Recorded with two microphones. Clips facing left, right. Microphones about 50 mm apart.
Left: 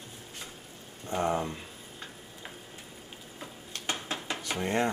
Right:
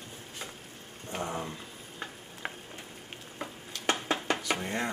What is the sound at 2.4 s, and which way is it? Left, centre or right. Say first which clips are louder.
Frying: right 8 dB; right.